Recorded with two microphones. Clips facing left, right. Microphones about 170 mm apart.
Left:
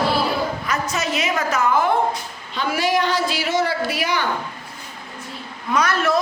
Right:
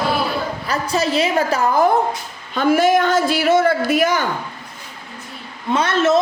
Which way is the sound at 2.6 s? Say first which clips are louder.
Right 6 dB; 50° right (ahead or behind).